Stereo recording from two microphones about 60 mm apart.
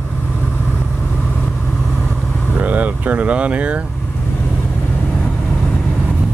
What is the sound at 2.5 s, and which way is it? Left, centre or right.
Vehicle, right.